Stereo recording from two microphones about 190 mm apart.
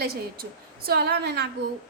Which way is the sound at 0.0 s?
55° right (ahead or behind).